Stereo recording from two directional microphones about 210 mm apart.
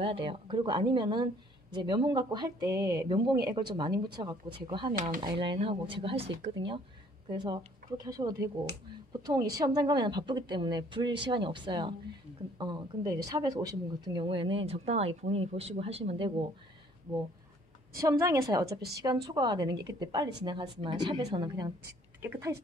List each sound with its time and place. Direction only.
0.0 s a woman's voice: 25° right (ahead or behind)
18.0 s a woman's voice: 15° right (ahead or behind)
18.8 s a woman's voice: 50° right (ahead or behind)
19.0 s a woman's voice: 20° right (ahead or behind)